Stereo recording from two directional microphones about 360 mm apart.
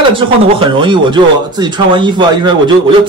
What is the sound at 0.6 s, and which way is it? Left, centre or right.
A man's voice, centre.